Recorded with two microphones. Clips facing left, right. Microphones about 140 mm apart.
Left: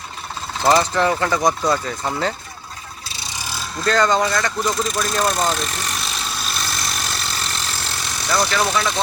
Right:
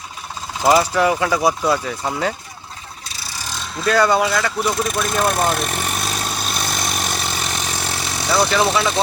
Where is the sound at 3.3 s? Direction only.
10° left (ahead or behind).